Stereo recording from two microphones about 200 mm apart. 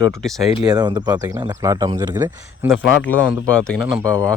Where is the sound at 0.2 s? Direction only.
Centre (ahead or behind).